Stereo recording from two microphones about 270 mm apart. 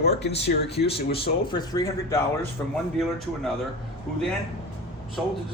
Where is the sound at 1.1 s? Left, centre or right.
Centre.